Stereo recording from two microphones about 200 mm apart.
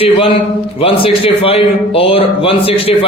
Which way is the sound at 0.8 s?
30° left (ahead or behind).